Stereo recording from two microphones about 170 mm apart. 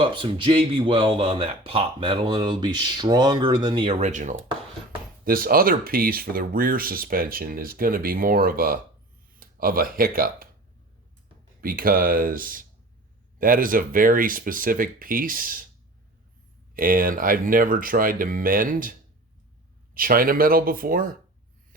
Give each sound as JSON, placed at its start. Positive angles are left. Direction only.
{"t": 0.0, "sound": "speech", "side_deg": -30}
{"t": 4.0, "sound": "speech", "side_deg": -45}
{"t": 5.2, "sound": "speech", "side_deg": -60}
{"t": 11.6, "sound": "speech", "side_deg": -60}
{"t": 16.7, "sound": "speech", "side_deg": -55}